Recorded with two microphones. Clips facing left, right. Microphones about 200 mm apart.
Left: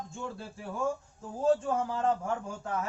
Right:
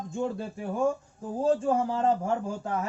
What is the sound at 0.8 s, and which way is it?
Speech, 35° right (ahead or behind).